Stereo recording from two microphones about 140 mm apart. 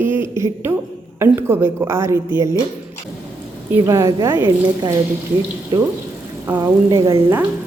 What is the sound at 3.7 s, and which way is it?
A woman's voice, 20° right (ahead or behind).